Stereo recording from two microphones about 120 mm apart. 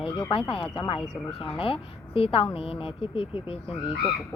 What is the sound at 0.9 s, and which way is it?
Speech, centre (ahead or behind).